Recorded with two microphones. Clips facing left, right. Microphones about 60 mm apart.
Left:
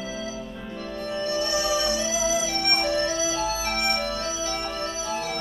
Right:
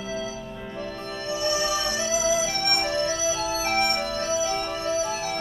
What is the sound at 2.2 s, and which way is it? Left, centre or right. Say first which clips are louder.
Music: right 1 dB; right.